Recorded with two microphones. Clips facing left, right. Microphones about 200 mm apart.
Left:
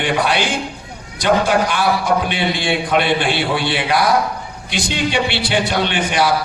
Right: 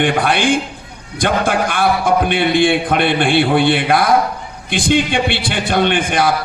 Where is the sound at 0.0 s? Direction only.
55° right (ahead or behind).